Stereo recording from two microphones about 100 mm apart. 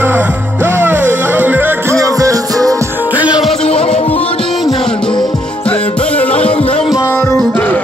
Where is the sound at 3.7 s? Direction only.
75° left (ahead or behind).